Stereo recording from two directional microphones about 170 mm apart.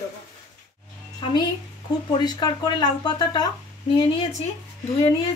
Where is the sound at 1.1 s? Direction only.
25° left (ahead or behind).